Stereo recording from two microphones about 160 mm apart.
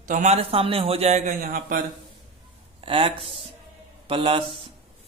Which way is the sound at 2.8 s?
35° right (ahead or behind).